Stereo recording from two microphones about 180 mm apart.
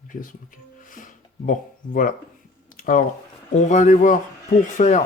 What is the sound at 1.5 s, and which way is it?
Speech, 50° left (ahead or behind).